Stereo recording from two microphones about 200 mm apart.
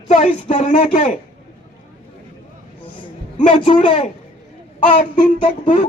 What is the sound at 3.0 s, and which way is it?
A woman's voice, 25° left (ahead or behind).